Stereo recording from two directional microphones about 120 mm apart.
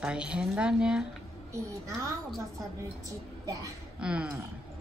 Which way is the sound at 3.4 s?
30° right (ahead or behind).